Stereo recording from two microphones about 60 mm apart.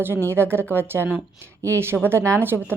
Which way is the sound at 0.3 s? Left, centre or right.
Right.